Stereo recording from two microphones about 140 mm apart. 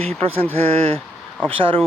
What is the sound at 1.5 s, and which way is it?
Speech, 40° right (ahead or behind).